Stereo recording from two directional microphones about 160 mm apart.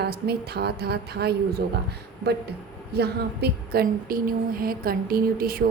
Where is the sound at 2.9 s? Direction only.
90° right.